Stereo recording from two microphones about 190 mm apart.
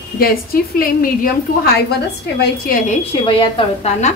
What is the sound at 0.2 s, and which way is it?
A woman's voice, 50° left (ahead or behind).